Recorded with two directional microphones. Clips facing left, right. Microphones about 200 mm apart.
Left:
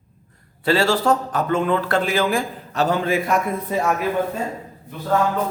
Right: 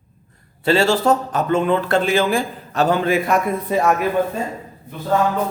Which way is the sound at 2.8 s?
65° right (ahead or behind).